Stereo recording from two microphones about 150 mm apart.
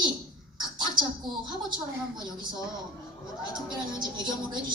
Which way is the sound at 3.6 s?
30° right (ahead or behind).